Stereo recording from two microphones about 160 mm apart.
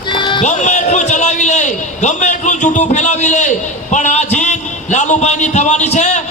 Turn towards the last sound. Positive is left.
turn(degrees=45)  # may be behind; listen again after turning